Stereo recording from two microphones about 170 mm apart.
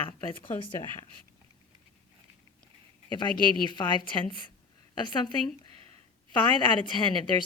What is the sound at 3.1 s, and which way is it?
A woman's voice, 25° left (ahead or behind).